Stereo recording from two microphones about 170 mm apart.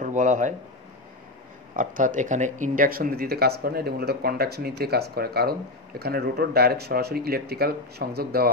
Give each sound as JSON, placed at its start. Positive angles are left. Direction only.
{"t": 0.0, "sound": "speech", "side_deg": -50}
{"t": 1.8, "sound": "speech", "side_deg": -50}